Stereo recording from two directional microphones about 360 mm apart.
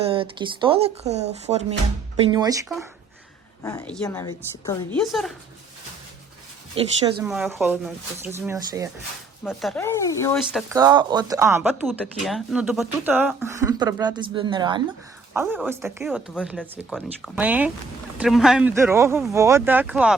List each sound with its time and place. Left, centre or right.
0.0 s speech: centre
3.6 s a woman's voice: centre
6.7 s speech: centre
7.3 s speech: centre
10.5 s speech: centre